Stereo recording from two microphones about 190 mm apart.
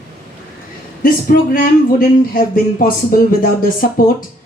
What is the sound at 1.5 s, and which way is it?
Speech, 50° left (ahead or behind).